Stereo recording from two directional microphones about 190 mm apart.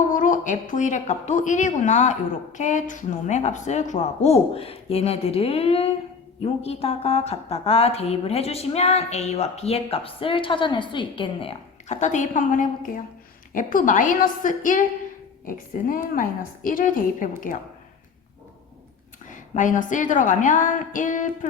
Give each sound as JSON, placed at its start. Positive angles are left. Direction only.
{"t": 0.1, "sound": "a woman's voice", "side_deg": 45}
{"t": 19.3, "sound": "a woman's voice", "side_deg": 40}